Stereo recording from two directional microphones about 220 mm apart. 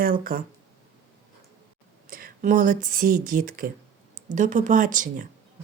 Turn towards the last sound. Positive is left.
turn(degrees=-35)  # may be behind; listen again after turning